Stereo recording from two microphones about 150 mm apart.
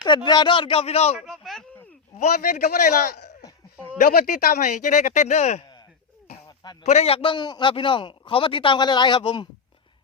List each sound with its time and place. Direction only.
0.0 s a man's voice: 30° left (ahead or behind)
1.1 s a man's voice: centre (ahead or behind)
2.1 s a man's voice: 50° left (ahead or behind); by 3.3 s 90° left
3.9 s speech: 70° left (ahead or behind)
4.6 s speech: 55° left (ahead or behind)
6.8 s a man's voice: 45° left (ahead or behind)